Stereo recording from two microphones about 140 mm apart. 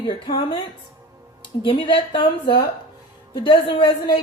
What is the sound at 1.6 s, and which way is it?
A woman's voice, 40° left (ahead or behind).